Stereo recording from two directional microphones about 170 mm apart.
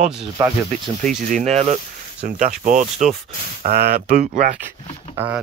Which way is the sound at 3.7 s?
70° right (ahead or behind).